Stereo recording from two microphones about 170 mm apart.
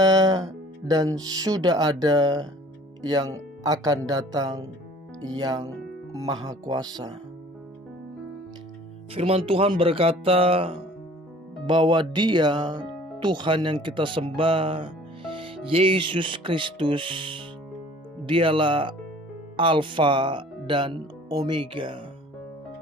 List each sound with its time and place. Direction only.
0.0 s speech: 20° right (ahead or behind)
9.1 s speech: 35° right (ahead or behind)